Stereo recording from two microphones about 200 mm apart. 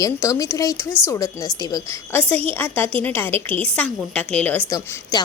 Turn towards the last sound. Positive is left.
turn(degrees=20)  # may be behind; listen again after turning